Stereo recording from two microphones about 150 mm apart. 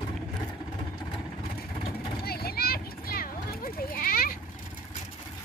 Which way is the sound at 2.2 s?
90° left.